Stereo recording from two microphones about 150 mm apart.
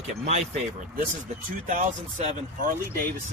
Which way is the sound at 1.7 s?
60° right (ahead or behind).